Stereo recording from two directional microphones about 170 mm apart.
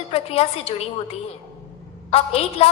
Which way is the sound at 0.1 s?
35° left (ahead or behind).